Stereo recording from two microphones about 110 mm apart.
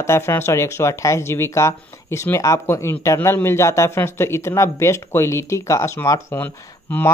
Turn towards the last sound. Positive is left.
turn(degrees=15)  # may be behind; listen again after turning